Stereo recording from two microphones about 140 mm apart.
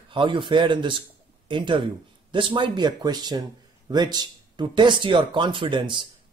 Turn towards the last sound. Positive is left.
turn(degrees=-35)  # may be behind; listen again after turning